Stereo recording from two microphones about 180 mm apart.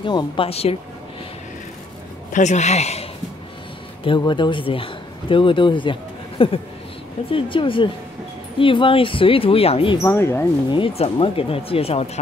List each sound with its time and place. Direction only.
0.0 s speech: 25° left (ahead or behind)
2.3 s speech: 40° left (ahead or behind)
4.0 s speech: 25° left (ahead or behind)
10.0 s speech: 15° left (ahead or behind)
10.7 s speech: 30° left (ahead or behind)